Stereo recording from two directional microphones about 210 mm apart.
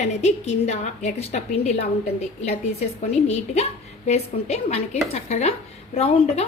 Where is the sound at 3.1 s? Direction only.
30° left (ahead or behind).